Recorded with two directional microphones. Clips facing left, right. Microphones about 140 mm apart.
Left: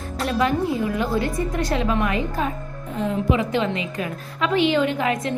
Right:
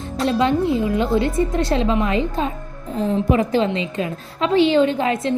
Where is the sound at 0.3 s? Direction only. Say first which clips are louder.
Right 4 dB; 25° right (ahead or behind).